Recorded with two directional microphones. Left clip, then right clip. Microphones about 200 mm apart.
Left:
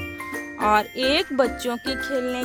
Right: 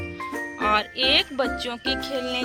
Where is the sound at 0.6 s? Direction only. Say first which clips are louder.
Left 2 dB; 50° left (ahead or behind).